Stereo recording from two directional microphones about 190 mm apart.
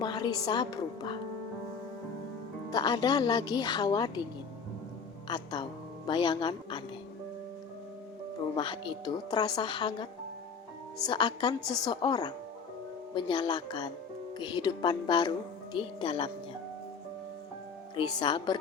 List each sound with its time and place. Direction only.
0.0 s speech: 20° left (ahead or behind)
2.6 s speech: 20° left (ahead or behind)
5.3 s speech: 25° left (ahead or behind)
8.5 s speech: 25° left (ahead or behind)
17.9 s speech: 25° left (ahead or behind)